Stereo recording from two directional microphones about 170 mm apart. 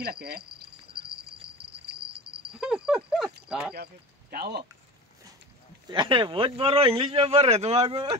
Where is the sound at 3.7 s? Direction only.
65° right (ahead or behind).